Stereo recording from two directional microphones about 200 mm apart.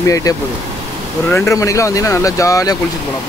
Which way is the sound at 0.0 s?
15° left (ahead or behind).